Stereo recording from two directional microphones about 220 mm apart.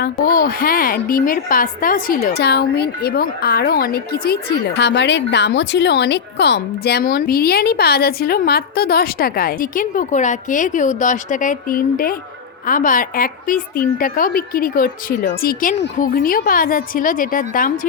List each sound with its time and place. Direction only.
0.0 s a woman's voice: 40° left (ahead or behind)